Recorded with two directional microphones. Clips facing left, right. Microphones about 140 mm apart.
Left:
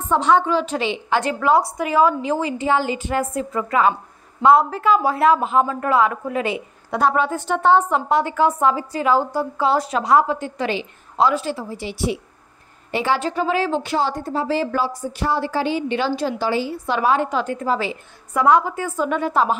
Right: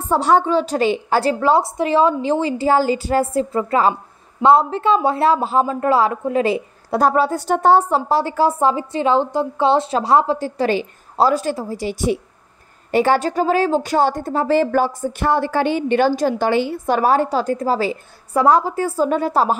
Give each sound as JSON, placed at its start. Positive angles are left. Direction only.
{"t": 0.0, "sound": "a woman's voice", "side_deg": -35}